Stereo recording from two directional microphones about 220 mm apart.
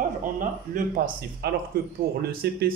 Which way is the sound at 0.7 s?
40° right (ahead or behind).